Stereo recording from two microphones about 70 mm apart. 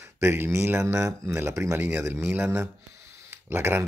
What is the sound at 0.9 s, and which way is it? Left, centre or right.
Speech, right.